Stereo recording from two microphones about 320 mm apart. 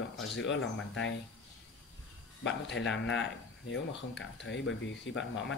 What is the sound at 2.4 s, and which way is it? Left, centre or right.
Speech, left.